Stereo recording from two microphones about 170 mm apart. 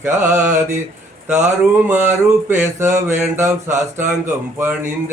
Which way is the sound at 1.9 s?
15° right (ahead or behind).